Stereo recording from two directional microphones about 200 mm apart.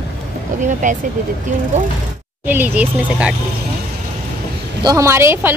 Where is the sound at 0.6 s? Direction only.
40° right (ahead or behind).